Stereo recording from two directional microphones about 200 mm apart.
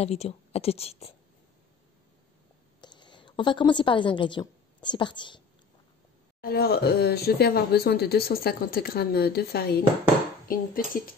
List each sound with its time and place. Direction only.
0.0 s speech: 30° left (ahead or behind)
2.8 s a woman's voice: 20° left (ahead or behind)
6.4 s speech: 50° left (ahead or behind)